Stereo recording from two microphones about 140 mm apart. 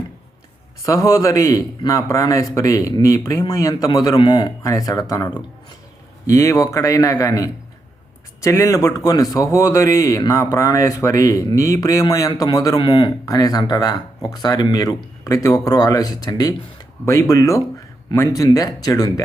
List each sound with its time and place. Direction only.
0.9 s a man's voice: 20° left (ahead or behind)
4.6 s a man's voice: 25° left (ahead or behind)